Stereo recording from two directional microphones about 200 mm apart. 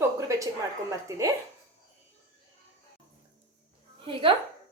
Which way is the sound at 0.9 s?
15° right (ahead or behind).